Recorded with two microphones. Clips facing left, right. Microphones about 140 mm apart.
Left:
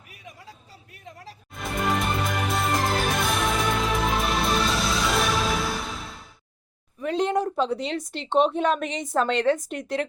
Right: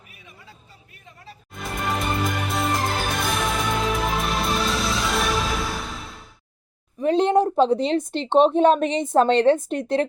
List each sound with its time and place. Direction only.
1.5 s music: centre (ahead or behind)
7.0 s a woman's voice: 25° right (ahead or behind)